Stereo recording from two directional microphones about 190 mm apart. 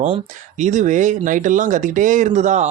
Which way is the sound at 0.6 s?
40° right (ahead or behind).